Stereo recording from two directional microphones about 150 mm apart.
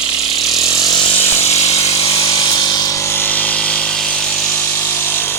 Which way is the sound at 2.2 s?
30° left (ahead or behind).